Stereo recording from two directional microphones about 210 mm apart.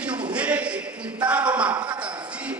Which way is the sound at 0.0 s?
5° right (ahead or behind).